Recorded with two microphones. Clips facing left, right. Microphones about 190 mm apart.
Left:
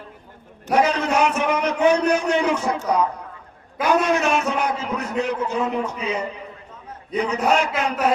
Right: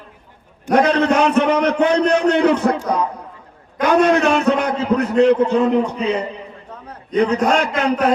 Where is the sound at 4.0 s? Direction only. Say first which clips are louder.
Right 9 dB; 60° right (ahead or behind).